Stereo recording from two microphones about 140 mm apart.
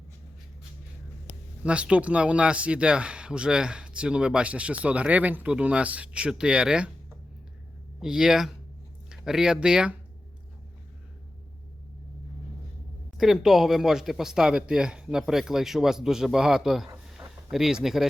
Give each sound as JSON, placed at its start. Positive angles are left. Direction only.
{"t": 1.6, "sound": "speech", "side_deg": -10}
{"t": 8.0, "sound": "speech", "side_deg": -5}
{"t": 13.1, "sound": "speech", "side_deg": 0}
{"t": 17.1, "sound": "a sound", "side_deg": 0}